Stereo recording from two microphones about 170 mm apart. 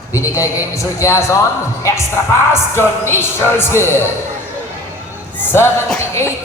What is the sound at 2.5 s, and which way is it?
Speech, 15° left (ahead or behind).